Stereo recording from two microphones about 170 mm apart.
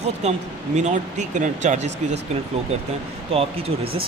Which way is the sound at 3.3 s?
35° right (ahead or behind).